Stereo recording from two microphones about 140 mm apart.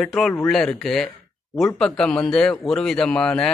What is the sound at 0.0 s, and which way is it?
A man's voice, 5° left (ahead or behind).